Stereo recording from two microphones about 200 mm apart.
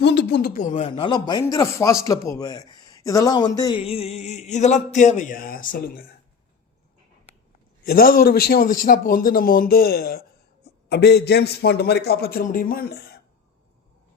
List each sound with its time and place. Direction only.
0.0 s a sound: 60° left (ahead or behind)
0.7 s speech: 30° left (ahead or behind); by 5.7 s 45° left (ahead or behind)
7.9 s a man's voice: 45° left (ahead or behind)